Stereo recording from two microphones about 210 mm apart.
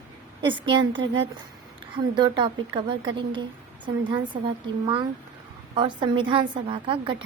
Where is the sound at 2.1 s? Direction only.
20° right (ahead or behind).